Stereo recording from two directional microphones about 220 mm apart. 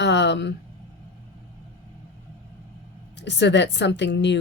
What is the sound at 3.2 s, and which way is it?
Speech, 50° left (ahead or behind).